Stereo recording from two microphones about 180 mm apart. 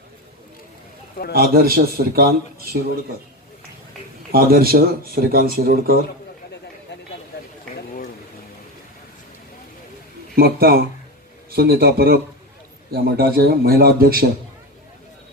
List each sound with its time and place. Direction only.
1.3 s a man's voice: 55° right (ahead or behind)
4.3 s a man's voice: 55° right (ahead or behind)
10.3 s a man's voice: 55° right (ahead or behind)